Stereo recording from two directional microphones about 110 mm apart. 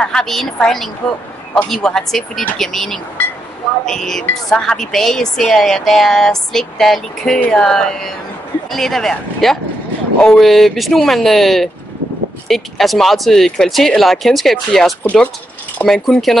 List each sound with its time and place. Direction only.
0.0 s a woman's voice: 5° left (ahead or behind)